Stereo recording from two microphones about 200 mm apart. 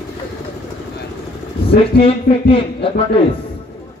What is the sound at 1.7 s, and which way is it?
A man's voice, 30° left (ahead or behind).